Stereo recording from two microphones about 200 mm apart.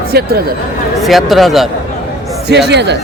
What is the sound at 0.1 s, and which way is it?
Speech, 50° right (ahead or behind).